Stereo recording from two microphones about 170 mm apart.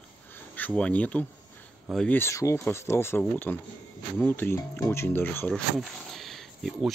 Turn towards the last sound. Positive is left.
turn(degrees=0)  # may be behind; listen again after turning